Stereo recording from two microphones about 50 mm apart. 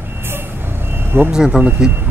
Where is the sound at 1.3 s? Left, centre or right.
Centre.